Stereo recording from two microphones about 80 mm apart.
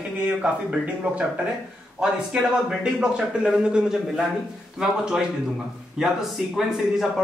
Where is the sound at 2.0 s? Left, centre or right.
Centre.